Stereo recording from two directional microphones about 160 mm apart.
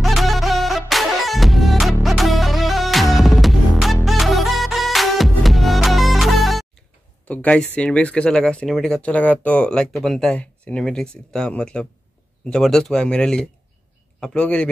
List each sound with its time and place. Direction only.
0.0 s music: centre (ahead or behind)
7.2 s a man's voice: 10° left (ahead or behind)